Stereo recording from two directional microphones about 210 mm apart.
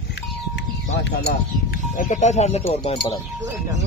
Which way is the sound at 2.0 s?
35° left (ahead or behind).